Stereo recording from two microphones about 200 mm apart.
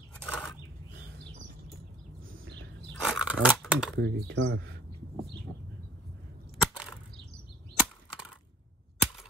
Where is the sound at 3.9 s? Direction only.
60° right (ahead or behind).